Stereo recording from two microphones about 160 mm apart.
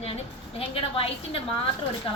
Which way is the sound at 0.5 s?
35° left (ahead or behind).